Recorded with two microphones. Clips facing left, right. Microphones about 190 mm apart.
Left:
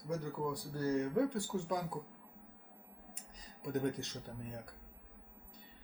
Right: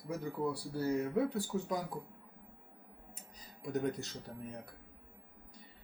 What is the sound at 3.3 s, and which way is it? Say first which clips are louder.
Speech: right 1 dB; centre (ahead or behind).